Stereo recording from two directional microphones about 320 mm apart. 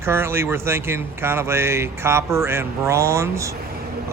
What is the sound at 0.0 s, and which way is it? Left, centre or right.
Speech, centre.